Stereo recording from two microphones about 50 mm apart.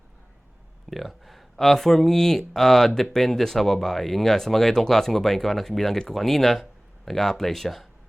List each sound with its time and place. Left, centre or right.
0.9 s speech: centre